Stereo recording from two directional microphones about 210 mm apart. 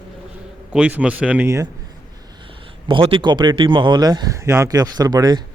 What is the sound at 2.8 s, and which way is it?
A man's voice, 25° right (ahead or behind).